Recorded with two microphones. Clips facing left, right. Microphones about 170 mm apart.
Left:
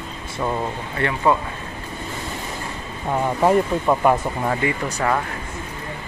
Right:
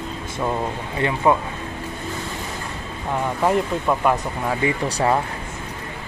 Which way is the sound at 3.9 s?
5° left (ahead or behind).